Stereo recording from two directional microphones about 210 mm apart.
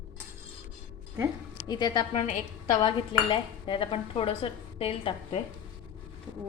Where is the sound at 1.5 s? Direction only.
20° left (ahead or behind).